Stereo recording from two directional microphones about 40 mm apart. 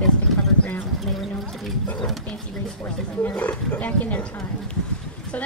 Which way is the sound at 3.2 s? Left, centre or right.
Left.